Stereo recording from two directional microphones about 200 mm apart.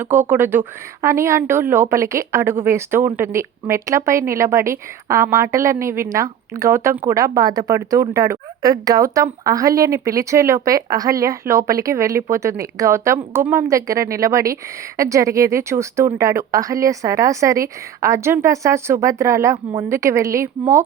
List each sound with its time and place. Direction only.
0.0 s speech: 10° right (ahead or behind)